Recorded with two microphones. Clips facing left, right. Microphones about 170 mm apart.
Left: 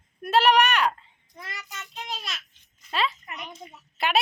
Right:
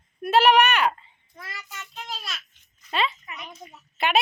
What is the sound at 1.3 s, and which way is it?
Child singing, 15° left (ahead or behind).